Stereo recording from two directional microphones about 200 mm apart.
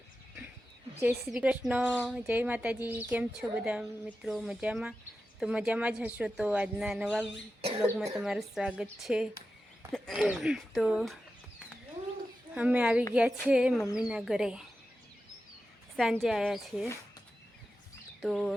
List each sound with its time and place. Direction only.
1.1 s a woman's voice: 5° right (ahead or behind)
7.6 s speech: 30° right (ahead or behind)
7.9 s a woman's voice: centre (ahead or behind)
12.5 s a woman's voice: 5° right (ahead or behind)
16.2 s a woman's voice: centre (ahead or behind)
18.2 s speech: centre (ahead or behind)